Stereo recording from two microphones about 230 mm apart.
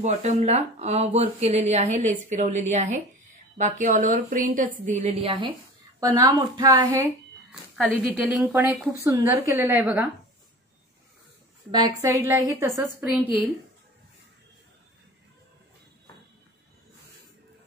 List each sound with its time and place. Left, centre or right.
0.0 s a woman's voice: right
7.7 s a woman's voice: centre
12.0 s a woman's voice: centre